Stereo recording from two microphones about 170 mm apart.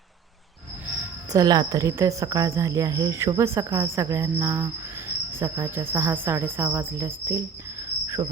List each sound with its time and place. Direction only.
1.3 s speech: 20° right (ahead or behind)